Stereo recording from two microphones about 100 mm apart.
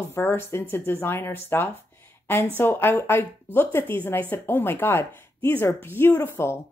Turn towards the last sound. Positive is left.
turn(degrees=25)  # may be behind; listen again after turning